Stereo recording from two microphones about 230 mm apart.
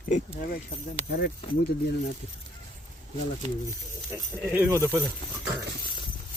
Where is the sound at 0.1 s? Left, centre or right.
Left.